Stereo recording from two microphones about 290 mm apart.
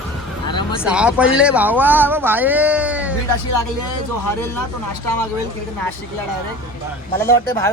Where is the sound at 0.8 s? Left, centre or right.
Centre.